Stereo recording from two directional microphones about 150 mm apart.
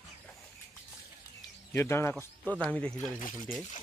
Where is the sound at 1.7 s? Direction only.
15° left (ahead or behind).